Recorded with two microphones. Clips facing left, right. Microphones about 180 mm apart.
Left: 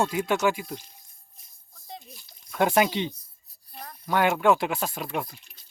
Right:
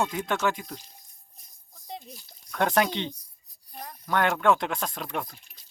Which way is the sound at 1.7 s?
20° right (ahead or behind).